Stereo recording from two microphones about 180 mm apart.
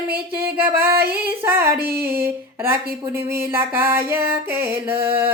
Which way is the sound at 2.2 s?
15° right (ahead or behind).